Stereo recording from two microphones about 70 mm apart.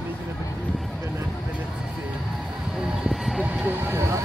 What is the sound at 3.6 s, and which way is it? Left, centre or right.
Speech, right.